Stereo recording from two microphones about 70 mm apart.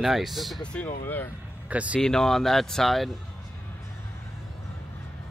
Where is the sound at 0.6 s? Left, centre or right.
Centre.